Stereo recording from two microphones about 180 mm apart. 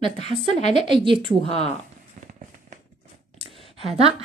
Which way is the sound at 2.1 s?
40° right (ahead or behind).